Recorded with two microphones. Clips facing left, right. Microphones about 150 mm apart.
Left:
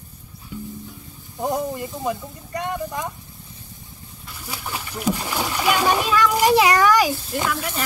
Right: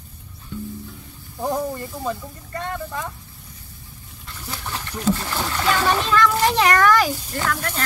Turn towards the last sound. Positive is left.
turn(degrees=10)  # may be behind; listen again after turning